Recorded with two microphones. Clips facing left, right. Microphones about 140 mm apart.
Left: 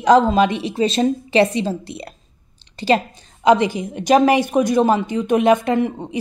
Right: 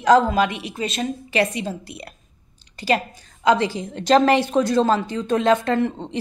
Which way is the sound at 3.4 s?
20° left (ahead or behind).